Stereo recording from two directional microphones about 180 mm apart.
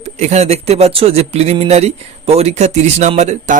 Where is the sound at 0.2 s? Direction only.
35° right (ahead or behind).